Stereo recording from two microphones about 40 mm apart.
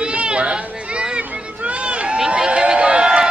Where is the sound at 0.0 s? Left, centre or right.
Right.